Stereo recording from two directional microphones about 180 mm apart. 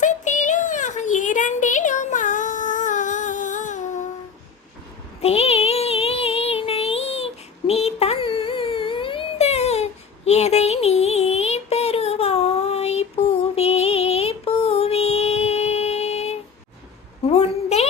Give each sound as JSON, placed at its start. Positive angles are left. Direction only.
{"t": 0.0, "sound": "child singing", "side_deg": 45}
{"t": 5.2, "sound": "music", "side_deg": 35}
{"t": 7.7, "sound": "a sound", "side_deg": 35}